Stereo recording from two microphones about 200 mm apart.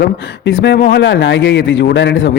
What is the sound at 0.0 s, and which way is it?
Speech, 55° left (ahead or behind).